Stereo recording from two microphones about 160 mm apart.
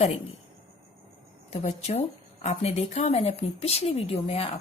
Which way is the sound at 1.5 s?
45° left (ahead or behind).